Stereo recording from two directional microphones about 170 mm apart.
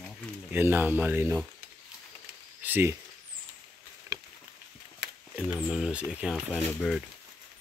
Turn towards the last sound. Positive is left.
turn(degrees=5)  # may be behind; listen again after turning